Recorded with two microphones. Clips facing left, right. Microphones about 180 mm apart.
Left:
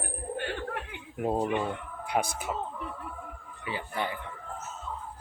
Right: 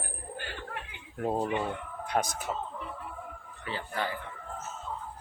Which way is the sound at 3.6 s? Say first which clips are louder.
Left 1 dB; 15° left (ahead or behind).